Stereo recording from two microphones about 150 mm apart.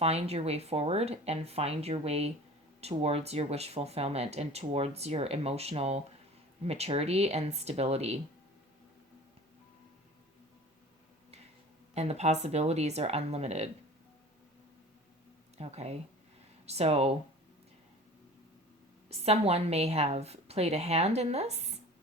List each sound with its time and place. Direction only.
0.0 s speech: 45° right (ahead or behind)
11.9 s speech: 45° right (ahead or behind)
15.5 s speech: 45° right (ahead or behind)
19.2 s speech: 45° right (ahead or behind)